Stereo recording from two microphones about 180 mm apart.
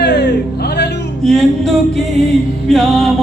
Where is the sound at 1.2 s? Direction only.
Centre (ahead or behind).